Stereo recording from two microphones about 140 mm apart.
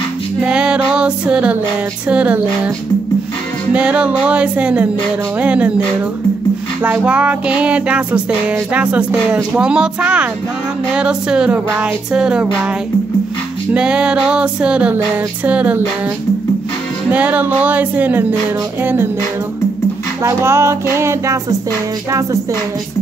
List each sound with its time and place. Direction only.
0.4 s music: 5° right (ahead or behind)
3.7 s music: 10° right (ahead or behind)
6.8 s music: 10° right (ahead or behind)
13.7 s music: 5° right (ahead or behind)
17.1 s music: 10° right (ahead or behind)
20.2 s music: 20° right (ahead or behind)